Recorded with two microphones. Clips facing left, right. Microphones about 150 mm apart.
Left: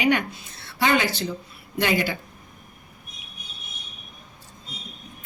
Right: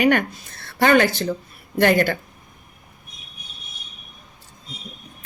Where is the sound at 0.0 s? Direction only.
50° right (ahead or behind).